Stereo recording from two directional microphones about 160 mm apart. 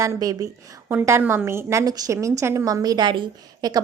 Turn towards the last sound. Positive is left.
turn(degrees=-30)  # may be behind; listen again after turning